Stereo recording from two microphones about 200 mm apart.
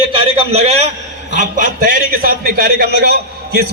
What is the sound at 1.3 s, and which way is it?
A man's voice, 45° right (ahead or behind).